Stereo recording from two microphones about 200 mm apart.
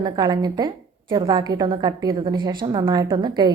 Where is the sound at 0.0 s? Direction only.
20° right (ahead or behind).